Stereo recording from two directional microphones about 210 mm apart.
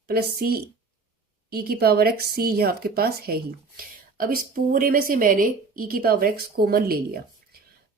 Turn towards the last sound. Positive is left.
turn(degrees=-45)  # may be behind; listen again after turning